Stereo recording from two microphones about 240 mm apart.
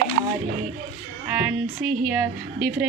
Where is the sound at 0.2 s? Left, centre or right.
Right.